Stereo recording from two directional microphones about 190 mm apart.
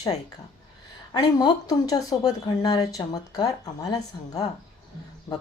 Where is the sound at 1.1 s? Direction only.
20° left (ahead or behind).